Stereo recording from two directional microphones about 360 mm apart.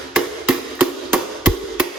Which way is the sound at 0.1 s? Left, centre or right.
Centre.